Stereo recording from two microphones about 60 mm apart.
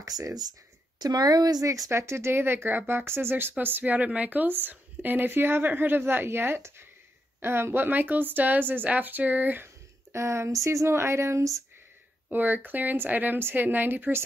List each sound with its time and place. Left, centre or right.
0.0 s a woman's voice: right
1.9 s speech: right
10.1 s speech: right
12.3 s speech: right